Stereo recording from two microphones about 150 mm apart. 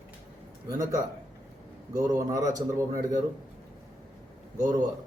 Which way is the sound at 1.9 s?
25° right (ahead or behind).